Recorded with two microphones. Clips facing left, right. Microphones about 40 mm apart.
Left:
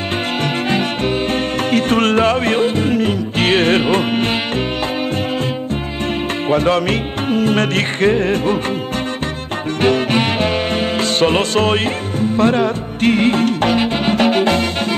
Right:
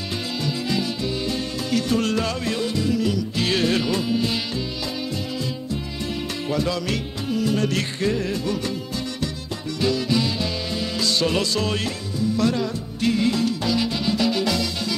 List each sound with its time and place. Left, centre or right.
1.7 s music: left
6.5 s music: left
9.8 s music: left